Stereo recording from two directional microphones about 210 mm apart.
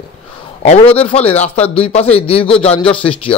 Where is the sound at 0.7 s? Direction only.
25° left (ahead or behind).